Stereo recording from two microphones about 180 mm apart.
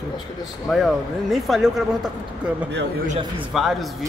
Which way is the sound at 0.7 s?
Centre (ahead or behind).